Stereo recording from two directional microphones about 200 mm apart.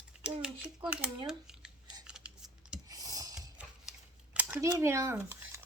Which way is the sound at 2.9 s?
20° right (ahead or behind).